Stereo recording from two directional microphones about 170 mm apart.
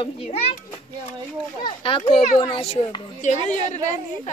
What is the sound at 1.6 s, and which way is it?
A child's voice, 30° left (ahead or behind).